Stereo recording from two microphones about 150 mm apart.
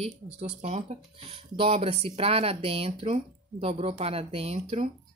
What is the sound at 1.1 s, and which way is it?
Speech, 40° right (ahead or behind).